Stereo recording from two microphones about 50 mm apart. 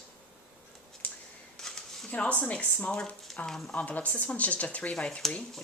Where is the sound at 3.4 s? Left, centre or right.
Centre.